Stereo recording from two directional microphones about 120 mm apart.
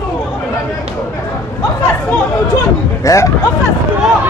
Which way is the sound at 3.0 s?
25° left (ahead or behind).